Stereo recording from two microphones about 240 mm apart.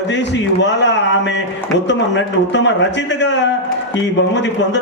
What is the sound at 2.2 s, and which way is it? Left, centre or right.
A man's voice, left.